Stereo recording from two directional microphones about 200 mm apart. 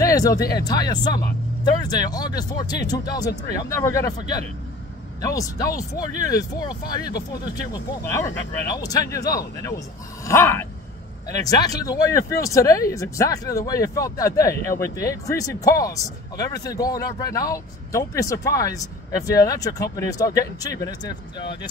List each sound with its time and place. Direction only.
0.0 s speech: 15° left (ahead or behind)